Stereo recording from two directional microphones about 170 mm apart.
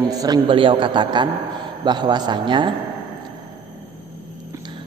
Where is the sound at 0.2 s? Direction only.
25° right (ahead or behind).